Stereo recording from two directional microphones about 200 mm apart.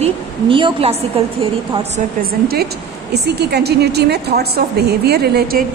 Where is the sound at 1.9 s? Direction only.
50° right (ahead or behind).